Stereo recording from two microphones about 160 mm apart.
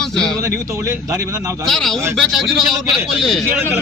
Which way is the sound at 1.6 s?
Centre (ahead or behind).